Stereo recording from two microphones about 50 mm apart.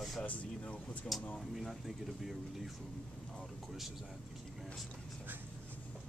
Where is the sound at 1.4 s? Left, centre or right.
Centre.